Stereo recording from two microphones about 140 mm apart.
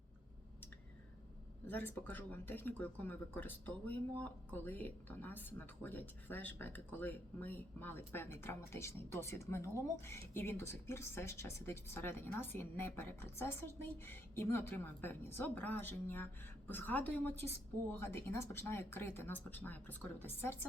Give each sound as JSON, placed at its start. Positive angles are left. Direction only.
{"t": 1.6, "sound": "speech", "side_deg": 15}